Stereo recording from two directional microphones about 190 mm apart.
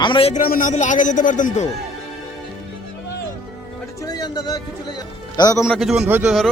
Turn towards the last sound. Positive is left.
turn(degrees=-5)  # may be behind; listen again after turning